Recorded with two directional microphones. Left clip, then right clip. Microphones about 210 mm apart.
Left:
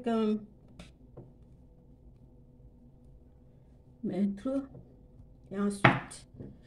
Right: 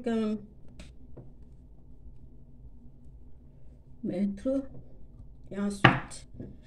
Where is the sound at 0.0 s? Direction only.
Centre (ahead or behind).